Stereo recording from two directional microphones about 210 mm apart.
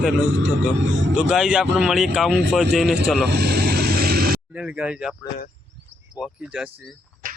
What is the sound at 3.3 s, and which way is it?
Vehicle, 50° right (ahead or behind).